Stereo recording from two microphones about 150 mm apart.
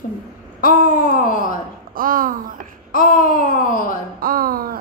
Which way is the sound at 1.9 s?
70° right (ahead or behind).